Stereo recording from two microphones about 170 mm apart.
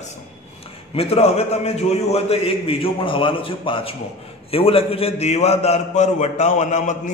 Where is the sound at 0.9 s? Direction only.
35° left (ahead or behind).